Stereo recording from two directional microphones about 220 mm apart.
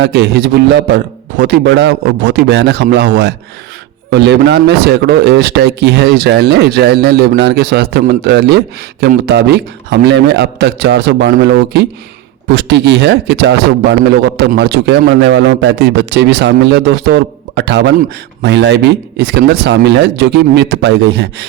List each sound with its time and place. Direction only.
0.0 s speech: 50° right (ahead or behind)